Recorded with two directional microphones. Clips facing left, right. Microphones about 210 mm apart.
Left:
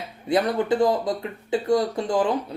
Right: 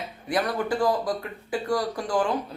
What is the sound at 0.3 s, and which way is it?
A man's voice, 25° left (ahead or behind).